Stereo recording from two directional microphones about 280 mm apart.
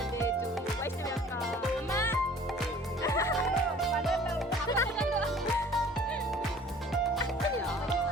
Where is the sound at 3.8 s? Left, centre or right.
Centre.